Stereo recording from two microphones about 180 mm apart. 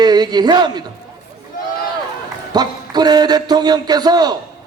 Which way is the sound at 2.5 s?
20° right (ahead or behind).